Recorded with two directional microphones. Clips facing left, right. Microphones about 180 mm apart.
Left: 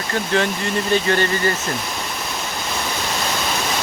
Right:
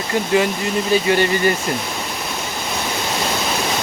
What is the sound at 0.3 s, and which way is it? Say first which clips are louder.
Speech: right 2 dB; 10° right (ahead or behind).